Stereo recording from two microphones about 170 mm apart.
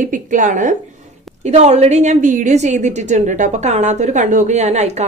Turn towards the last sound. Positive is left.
turn(degrees=-40)  # may be behind; listen again after turning